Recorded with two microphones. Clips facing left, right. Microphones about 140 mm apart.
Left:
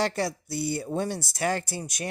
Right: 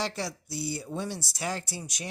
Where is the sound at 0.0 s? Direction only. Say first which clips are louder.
Left 6 dB; 55° left (ahead or behind).